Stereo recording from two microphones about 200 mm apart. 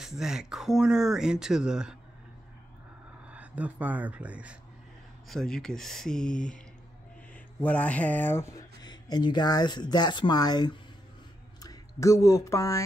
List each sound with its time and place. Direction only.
0.0 s speech: 5° right (ahead or behind)
3.3 s speech: 5° right (ahead or behind)
7.6 s speech: 5° left (ahead or behind)